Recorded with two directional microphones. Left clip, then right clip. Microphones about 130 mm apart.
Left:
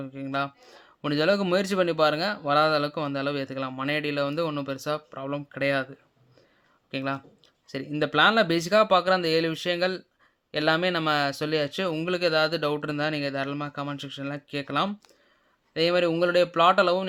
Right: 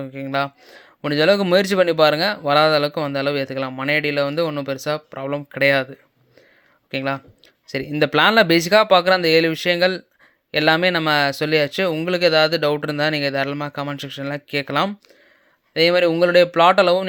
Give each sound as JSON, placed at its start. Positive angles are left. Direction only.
{"t": 0.0, "sound": "speech", "side_deg": -35}